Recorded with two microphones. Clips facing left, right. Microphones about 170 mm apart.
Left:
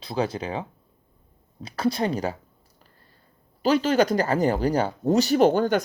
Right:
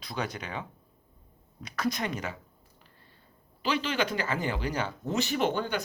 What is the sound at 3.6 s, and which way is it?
Speech, 40° left (ahead or behind).